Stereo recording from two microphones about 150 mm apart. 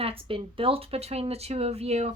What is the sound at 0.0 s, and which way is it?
A woman's voice, 40° right (ahead or behind).